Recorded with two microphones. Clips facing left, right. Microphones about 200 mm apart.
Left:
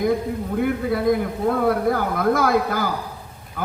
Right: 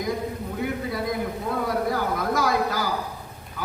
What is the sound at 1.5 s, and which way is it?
A man's voice, 55° left (ahead or behind).